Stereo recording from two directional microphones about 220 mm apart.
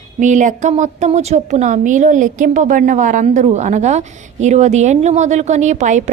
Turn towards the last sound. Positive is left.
turn(degrees=-35)  # may be behind; listen again after turning